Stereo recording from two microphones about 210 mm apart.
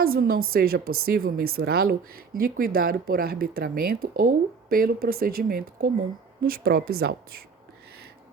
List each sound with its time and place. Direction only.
0.0 s speech: 45° right (ahead or behind)